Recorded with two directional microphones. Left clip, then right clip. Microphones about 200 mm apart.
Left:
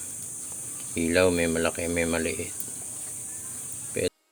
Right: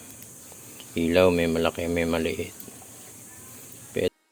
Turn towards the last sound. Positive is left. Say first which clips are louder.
# right 2 dB
turn(degrees=-25)  # may be behind; listen again after turning